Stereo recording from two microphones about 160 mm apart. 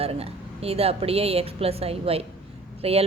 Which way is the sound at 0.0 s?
40° right (ahead or behind).